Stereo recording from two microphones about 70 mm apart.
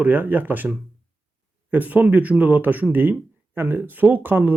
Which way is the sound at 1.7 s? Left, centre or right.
Right.